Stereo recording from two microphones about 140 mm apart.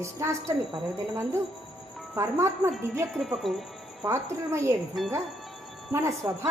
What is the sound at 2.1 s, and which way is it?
Speech, 20° right (ahead or behind).